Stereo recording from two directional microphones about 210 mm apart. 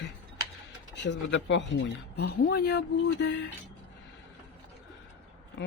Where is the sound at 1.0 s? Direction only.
55° left (ahead or behind).